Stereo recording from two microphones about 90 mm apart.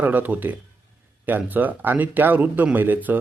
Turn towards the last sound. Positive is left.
turn(degrees=-20)  # may be behind; listen again after turning